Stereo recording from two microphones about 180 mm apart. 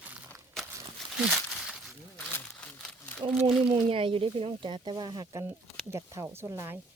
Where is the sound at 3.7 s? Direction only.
30° right (ahead or behind); by 6.8 s 15° right (ahead or behind).